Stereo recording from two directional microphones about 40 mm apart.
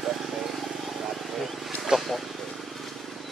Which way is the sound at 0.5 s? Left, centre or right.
Centre.